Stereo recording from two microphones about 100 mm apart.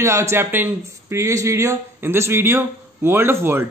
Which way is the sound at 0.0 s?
30° right (ahead or behind).